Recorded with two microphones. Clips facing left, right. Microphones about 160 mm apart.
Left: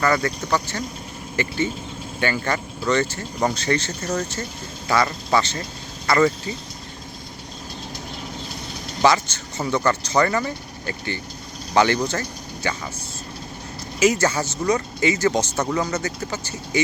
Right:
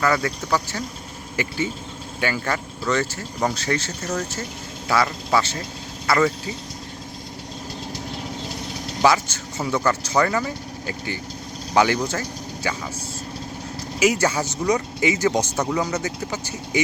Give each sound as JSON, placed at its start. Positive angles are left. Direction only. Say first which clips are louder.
{"t": 0.0, "sound": "speech", "louder": "left 1 dB", "side_deg": -5}
{"t": 9.0, "sound": "speech", "louder": "even", "side_deg": -10}
{"t": 14.0, "sound": "speech", "louder": "left 1 dB", "side_deg": -10}